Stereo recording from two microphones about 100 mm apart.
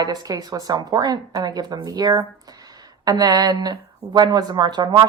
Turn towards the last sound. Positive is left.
turn(degrees=-45)  # may be behind; listen again after turning